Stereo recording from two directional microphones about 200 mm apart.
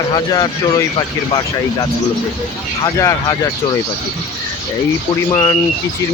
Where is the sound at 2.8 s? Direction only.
15° left (ahead or behind).